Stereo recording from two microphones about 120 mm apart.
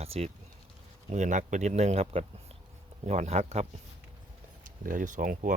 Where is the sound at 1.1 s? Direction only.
85° right; by 3.7 s 60° right (ahead or behind).